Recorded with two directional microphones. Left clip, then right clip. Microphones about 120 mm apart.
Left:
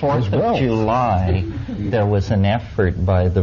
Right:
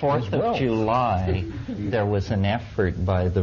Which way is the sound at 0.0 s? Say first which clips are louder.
Left 4 dB; 20° right (ahead or behind).